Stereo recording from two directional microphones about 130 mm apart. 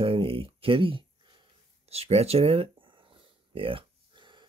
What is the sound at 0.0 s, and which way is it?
Speech, 45° right (ahead or behind).